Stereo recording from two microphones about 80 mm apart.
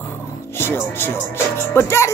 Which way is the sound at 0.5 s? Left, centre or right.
Left.